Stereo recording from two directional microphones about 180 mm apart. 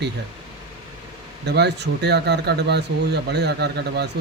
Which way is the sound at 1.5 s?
70° right (ahead or behind).